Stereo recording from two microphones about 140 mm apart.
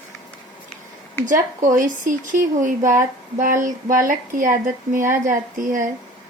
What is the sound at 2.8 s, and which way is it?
Speech, 20° right (ahead or behind).